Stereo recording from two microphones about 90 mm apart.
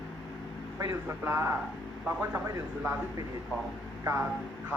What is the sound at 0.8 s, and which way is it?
A man's voice, 30° right (ahead or behind).